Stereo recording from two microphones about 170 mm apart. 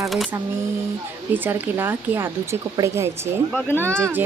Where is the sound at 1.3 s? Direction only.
10° right (ahead or behind).